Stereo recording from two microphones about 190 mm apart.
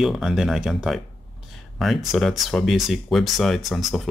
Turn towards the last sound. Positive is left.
turn(degrees=0)  # may be behind; listen again after turning